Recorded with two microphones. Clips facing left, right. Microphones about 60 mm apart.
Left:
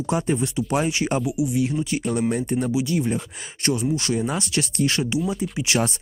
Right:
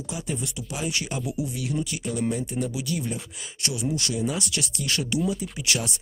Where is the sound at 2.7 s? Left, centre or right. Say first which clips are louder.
Left 7 dB; left.